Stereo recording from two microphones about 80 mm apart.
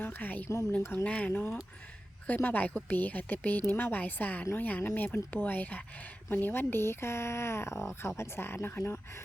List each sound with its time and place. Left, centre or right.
0.0 s a woman's voice: left